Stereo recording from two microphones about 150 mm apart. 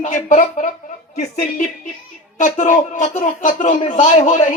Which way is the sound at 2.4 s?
60° left (ahead or behind).